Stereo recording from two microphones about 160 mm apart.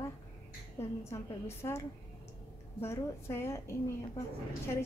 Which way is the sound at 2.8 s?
15° left (ahead or behind).